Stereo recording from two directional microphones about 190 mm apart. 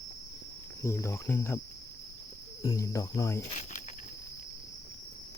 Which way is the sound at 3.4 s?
40° left (ahead or behind).